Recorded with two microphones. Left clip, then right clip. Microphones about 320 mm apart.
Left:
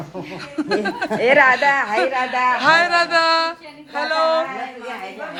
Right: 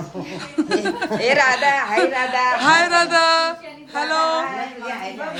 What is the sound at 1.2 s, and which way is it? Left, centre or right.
Speech, centre.